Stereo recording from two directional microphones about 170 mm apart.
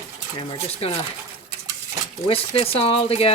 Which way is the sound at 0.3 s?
35° left (ahead or behind).